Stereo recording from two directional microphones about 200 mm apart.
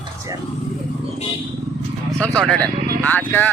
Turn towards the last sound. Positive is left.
turn(degrees=10)  # may be behind; listen again after turning